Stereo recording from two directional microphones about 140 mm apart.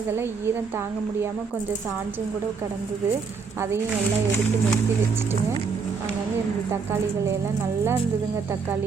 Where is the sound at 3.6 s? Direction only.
20° right (ahead or behind).